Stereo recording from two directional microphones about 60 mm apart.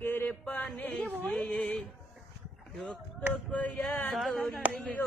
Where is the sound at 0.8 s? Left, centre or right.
Left.